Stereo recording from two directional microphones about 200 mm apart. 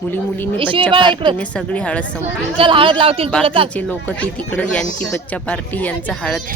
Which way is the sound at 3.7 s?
5° left (ahead or behind).